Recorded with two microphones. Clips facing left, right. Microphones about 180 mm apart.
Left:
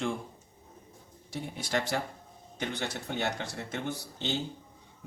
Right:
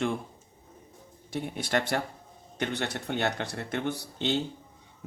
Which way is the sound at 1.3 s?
60° right (ahead or behind).